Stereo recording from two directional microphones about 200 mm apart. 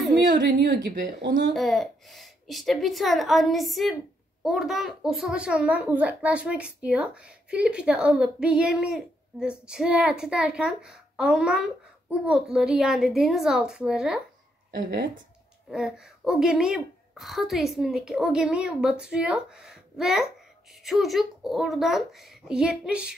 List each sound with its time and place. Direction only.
0.3 s a woman's voice: 55° right (ahead or behind)
1.5 s speech: centre (ahead or behind)
14.8 s speech: 55° right (ahead or behind)
15.7 s speech: centre (ahead or behind)